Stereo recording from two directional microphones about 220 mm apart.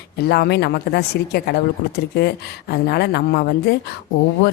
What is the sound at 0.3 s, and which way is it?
A woman's voice, 50° left (ahead or behind).